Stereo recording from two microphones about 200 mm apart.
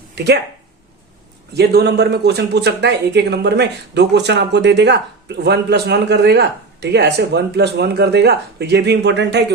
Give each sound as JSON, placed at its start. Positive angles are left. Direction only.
{"t": 1.5, "sound": "speech", "side_deg": -55}